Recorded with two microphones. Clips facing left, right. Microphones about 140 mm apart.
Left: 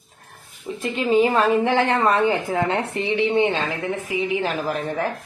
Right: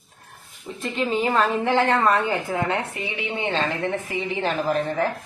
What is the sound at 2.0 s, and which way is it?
A woman's voice, 20° left (ahead or behind).